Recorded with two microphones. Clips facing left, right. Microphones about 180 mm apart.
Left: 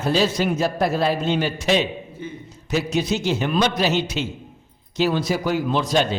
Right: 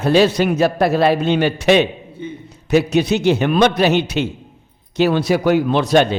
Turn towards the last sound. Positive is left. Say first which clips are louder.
# right 6 dB
turn(degrees=-65)  # may be behind; listen again after turning